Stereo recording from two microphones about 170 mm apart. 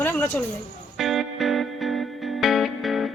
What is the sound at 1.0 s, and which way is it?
Music, centre (ahead or behind).